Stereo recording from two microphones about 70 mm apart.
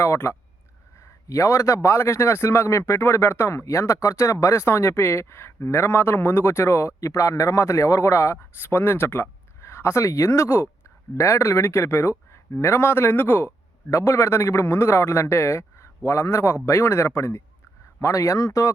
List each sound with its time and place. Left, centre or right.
0.0 s a man's voice: left